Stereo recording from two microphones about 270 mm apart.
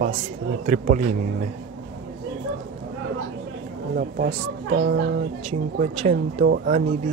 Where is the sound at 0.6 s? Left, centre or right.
Right.